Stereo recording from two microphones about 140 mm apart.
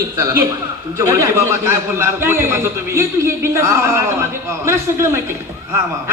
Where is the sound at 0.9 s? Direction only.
25° right (ahead or behind).